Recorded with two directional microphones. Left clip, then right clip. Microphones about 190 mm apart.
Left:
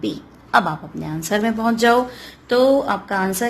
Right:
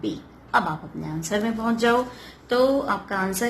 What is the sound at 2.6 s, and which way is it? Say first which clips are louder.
Speech: left 5 dB; 30° left (ahead or behind).